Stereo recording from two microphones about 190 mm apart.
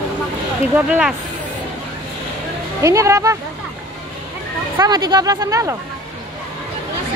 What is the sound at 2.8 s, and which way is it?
Speech, 15° right (ahead or behind).